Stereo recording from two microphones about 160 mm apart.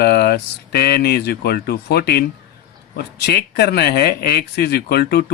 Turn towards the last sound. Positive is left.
turn(degrees=90)